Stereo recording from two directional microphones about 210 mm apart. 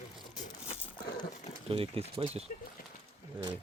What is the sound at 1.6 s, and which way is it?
Speech, 25° right (ahead or behind).